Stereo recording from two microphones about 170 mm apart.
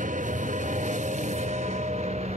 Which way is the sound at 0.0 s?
50° right (ahead or behind).